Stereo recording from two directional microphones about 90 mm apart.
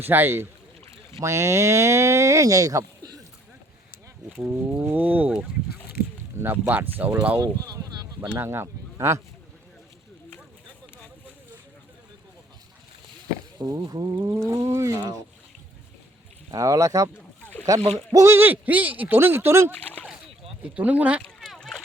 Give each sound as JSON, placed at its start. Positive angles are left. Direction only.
{"t": 0.1, "sound": "speech", "side_deg": -25}
{"t": 4.7, "sound": "speech", "side_deg": -20}
{"t": 6.4, "sound": "speech", "side_deg": -20}
{"t": 7.4, "sound": "speech", "side_deg": -40}
{"t": 8.4, "sound": "speech", "side_deg": -30}
{"t": 13.6, "sound": "speech", "side_deg": -45}
{"t": 16.5, "sound": "speech", "side_deg": -40}
{"t": 17.4, "sound": "boat", "side_deg": 15}
{"t": 17.7, "sound": "speech", "side_deg": -35}
{"t": 20.6, "sound": "speech", "side_deg": -15}
{"t": 21.2, "sound": "a sound", "side_deg": 0}